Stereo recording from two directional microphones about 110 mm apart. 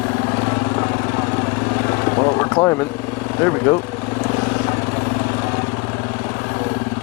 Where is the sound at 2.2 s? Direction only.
25° left (ahead or behind).